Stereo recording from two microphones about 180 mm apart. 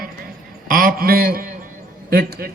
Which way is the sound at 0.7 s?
50° right (ahead or behind).